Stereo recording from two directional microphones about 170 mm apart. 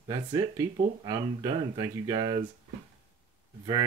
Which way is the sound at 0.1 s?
20° right (ahead or behind).